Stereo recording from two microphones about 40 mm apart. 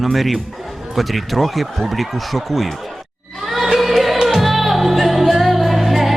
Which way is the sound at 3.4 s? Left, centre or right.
Centre.